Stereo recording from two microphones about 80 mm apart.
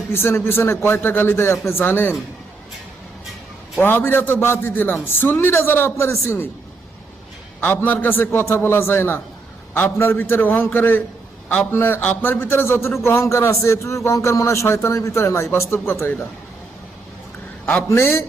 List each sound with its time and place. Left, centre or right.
0.1 s a man's voice: left
3.8 s a man's voice: left
7.6 s a man's voice: left
17.8 s a man's voice: left